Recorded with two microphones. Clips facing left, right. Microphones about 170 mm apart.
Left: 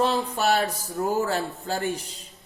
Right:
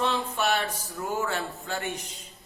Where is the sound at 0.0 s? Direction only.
35° left (ahead or behind).